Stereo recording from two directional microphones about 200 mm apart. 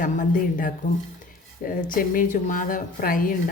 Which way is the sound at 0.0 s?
40° left (ahead or behind).